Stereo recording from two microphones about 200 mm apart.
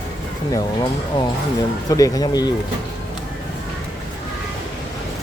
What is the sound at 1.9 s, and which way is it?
Speech, 15° left (ahead or behind).